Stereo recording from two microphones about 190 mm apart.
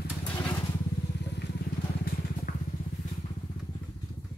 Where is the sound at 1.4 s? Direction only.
55° left (ahead or behind).